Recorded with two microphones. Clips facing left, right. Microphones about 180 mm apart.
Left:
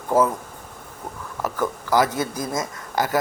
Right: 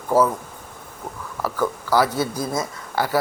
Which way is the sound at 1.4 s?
20° left (ahead or behind).